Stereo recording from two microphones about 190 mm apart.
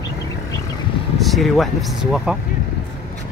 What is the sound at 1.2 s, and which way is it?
Speech, centre (ahead or behind).